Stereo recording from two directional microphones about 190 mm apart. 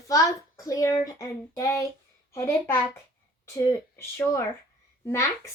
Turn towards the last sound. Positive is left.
turn(degrees=15)  # may be behind; listen again after turning